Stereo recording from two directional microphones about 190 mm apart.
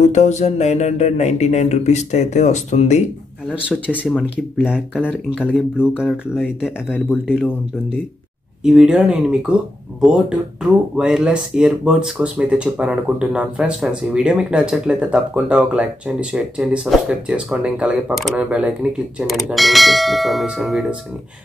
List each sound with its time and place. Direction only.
0.0 s speech: 35° left (ahead or behind)
3.6 s speech: 10° left (ahead or behind)
7.1 s speech: 5° right (ahead or behind)
8.6 s speech: 5° right (ahead or behind)